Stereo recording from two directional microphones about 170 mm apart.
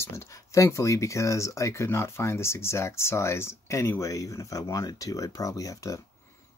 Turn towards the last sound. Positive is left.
turn(degrees=20)  # may be behind; listen again after turning